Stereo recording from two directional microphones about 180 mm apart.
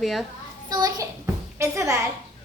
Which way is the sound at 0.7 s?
20° right (ahead or behind).